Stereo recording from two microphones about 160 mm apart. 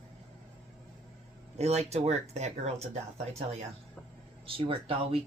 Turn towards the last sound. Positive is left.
turn(degrees=-35)  # may be behind; listen again after turning